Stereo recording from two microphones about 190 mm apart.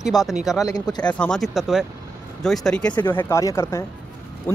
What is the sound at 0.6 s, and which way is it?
Speech, 20° left (ahead or behind).